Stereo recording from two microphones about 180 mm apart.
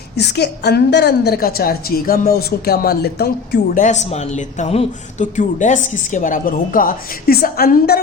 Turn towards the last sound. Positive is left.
turn(degrees=60)  # may be behind; listen again after turning